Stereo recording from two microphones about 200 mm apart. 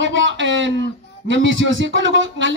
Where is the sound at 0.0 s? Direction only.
70° right (ahead or behind).